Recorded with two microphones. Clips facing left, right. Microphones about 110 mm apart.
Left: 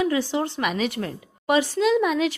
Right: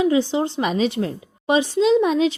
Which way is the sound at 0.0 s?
20° right (ahead or behind).